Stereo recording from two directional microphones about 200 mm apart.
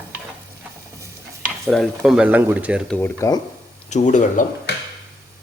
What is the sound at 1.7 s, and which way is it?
Speech, centre (ahead or behind).